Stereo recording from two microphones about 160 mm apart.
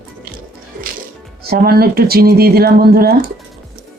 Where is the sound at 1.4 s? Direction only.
75° right (ahead or behind).